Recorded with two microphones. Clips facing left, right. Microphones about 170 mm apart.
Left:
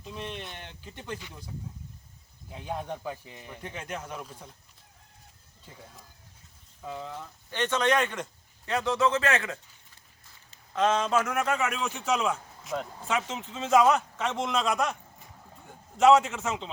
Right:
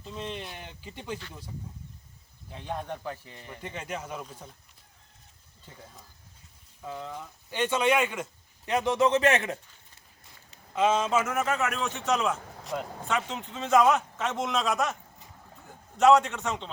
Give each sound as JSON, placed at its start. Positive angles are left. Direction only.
{"t": 0.0, "sound": "speech", "side_deg": 5}
{"t": 2.5, "sound": "speech", "side_deg": 10}
{"t": 3.6, "sound": "a man's voice", "side_deg": -5}
{"t": 5.6, "sound": "a man's voice", "side_deg": 5}
{"t": 7.5, "sound": "a man's voice", "side_deg": -10}
{"t": 8.6, "sound": "speech", "side_deg": -20}
{"t": 10.8, "sound": "a man's voice", "side_deg": -10}